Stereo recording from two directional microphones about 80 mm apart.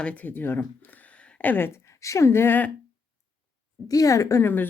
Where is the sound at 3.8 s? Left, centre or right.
Left.